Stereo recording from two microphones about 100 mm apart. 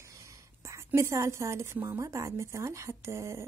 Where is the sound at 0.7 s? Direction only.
30° right (ahead or behind).